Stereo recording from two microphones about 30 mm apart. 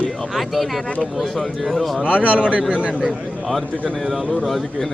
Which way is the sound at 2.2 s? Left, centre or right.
Right.